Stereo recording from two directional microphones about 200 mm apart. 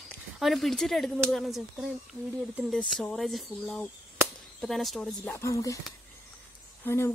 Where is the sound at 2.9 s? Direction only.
Centre (ahead or behind).